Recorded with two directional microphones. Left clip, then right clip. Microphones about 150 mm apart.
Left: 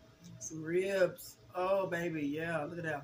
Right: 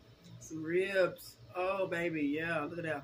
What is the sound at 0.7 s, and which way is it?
A man's voice, 35° left (ahead or behind).